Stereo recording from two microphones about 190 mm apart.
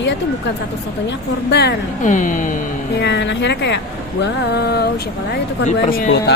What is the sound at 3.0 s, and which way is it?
Speech, 65° left (ahead or behind).